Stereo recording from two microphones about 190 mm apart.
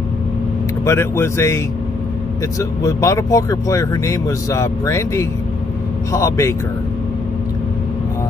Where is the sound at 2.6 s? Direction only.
15° left (ahead or behind).